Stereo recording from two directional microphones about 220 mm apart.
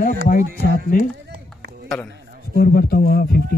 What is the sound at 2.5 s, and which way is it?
Speech, 45° left (ahead or behind).